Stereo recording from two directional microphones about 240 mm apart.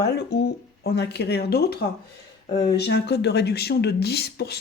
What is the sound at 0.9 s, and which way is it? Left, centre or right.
Speech, left.